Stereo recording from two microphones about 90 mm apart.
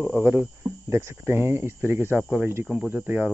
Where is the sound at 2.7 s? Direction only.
15° right (ahead or behind).